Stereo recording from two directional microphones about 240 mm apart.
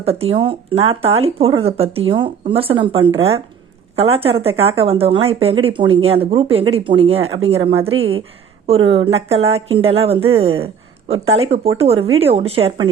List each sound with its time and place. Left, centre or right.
0.0 s speech: right